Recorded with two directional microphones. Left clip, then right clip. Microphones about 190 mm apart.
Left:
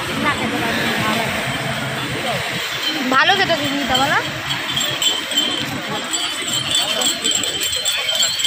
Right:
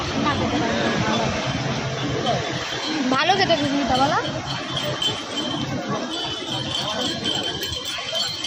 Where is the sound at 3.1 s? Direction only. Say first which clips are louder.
Left 5 dB; centre (ahead or behind).